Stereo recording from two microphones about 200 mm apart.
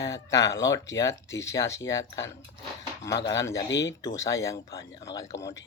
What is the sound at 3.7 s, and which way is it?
Speech, 65° left (ahead or behind).